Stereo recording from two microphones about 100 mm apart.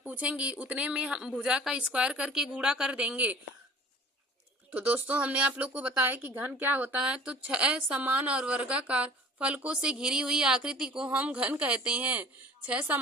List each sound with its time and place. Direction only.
0.0 s a woman's voice: 15° right (ahead or behind)
4.7 s a woman's voice: 15° right (ahead or behind)